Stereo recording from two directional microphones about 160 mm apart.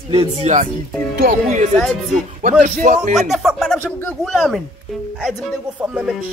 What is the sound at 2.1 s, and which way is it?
Speech, 50° right (ahead or behind).